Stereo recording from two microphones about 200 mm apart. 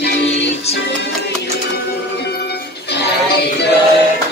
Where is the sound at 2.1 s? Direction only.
55° left (ahead or behind).